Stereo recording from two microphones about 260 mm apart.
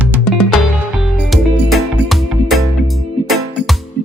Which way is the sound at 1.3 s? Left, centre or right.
Centre.